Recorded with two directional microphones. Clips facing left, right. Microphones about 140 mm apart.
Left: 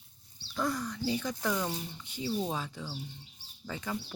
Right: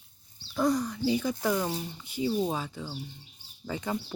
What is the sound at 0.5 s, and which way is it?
Speech, 15° right (ahead or behind).